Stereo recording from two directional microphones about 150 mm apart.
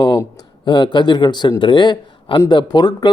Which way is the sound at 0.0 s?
25° left (ahead or behind).